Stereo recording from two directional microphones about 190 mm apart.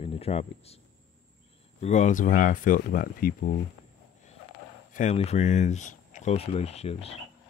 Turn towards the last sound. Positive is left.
turn(degrees=35)  # may be behind; listen again after turning